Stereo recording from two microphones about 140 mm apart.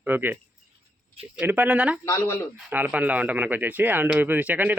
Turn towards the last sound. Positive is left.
turn(degrees=-10)  # may be behind; listen again after turning